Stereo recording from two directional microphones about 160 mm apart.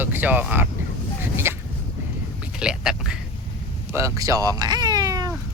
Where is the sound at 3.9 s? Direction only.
20° right (ahead or behind).